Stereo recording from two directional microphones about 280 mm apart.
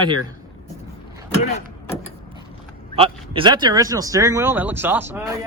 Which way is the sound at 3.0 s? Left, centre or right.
Centre.